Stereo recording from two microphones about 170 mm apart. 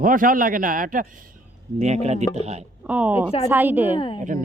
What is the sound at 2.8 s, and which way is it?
Speech, 10° right (ahead or behind).